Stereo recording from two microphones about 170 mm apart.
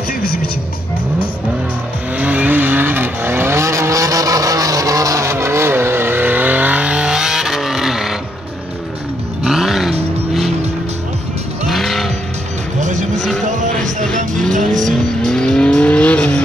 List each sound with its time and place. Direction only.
2.1 s vehicle: 10° right (ahead or behind)
9.4 s vehicle: centre (ahead or behind)
11.6 s vehicle: centre (ahead or behind)
12.8 s vehicle: 45° right (ahead or behind)
14.0 s vehicle: 5° left (ahead or behind)